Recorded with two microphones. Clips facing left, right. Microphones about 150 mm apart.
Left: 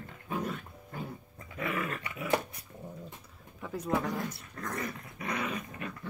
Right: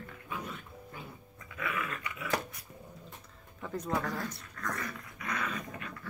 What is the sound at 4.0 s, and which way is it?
Dog, 20° left (ahead or behind).